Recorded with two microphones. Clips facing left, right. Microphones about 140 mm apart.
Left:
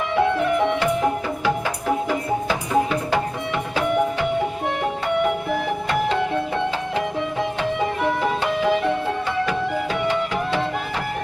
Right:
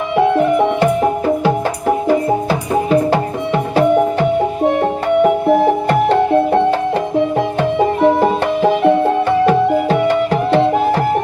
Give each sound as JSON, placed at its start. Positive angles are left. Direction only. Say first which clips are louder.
{"t": 2.0, "sound": "music", "louder": "right 8 dB", "side_deg": -35}